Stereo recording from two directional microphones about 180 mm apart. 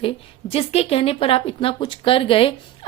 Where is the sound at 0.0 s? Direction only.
30° left (ahead or behind).